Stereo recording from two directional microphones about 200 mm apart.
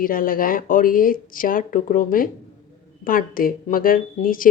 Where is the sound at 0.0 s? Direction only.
45° left (ahead or behind).